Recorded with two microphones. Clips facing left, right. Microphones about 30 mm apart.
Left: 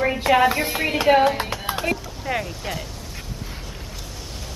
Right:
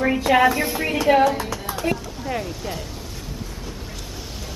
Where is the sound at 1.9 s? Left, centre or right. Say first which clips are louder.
Right 3 dB; centre.